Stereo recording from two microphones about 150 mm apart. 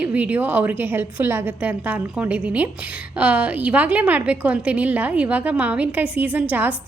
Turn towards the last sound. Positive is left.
turn(degrees=-10)  # may be behind; listen again after turning